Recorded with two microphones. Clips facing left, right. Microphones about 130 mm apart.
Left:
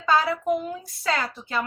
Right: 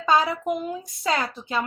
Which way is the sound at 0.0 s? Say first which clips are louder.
Right 1 dB; 20° right (ahead or behind).